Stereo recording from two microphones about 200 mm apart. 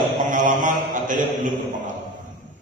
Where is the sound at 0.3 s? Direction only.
40° right (ahead or behind).